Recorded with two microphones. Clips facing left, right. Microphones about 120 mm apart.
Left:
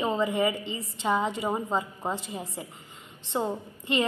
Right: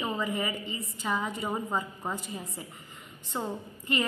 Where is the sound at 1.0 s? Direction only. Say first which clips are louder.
Left 5 dB; 25° left (ahead or behind).